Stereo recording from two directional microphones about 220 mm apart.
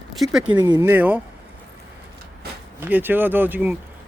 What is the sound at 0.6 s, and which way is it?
Speech, 15° right (ahead or behind).